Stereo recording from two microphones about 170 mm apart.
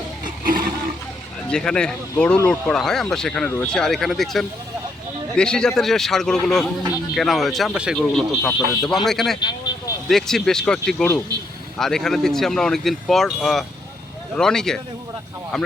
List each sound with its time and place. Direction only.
0.4 s a sound: 55° right (ahead or behind)
1.5 s speech: 5° left (ahead or behind)
8.0 s speech: 5° left (ahead or behind)
9.4 s vehicle: 25° left (ahead or behind)
10.1 s speech: centre (ahead or behind)